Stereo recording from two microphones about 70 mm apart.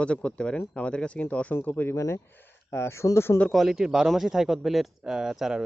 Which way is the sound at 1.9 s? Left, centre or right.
Left.